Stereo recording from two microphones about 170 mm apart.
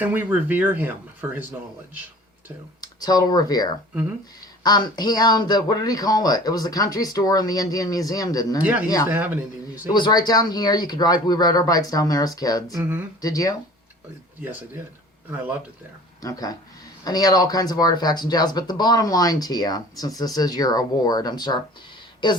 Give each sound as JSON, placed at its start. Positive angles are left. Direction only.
{"t": 0.0, "sound": "speech", "side_deg": -10}
{"t": 2.8, "sound": "speech", "side_deg": 20}
{"t": 9.0, "sound": "speech", "side_deg": -10}
{"t": 9.9, "sound": "speech", "side_deg": 25}
{"t": 12.7, "sound": "speech", "side_deg": -10}
{"t": 13.2, "sound": "speech", "side_deg": 20}
{"t": 16.2, "sound": "speech", "side_deg": 20}